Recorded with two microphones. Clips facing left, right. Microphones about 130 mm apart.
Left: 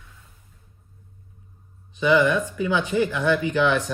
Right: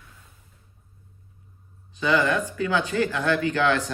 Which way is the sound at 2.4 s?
20° left (ahead or behind).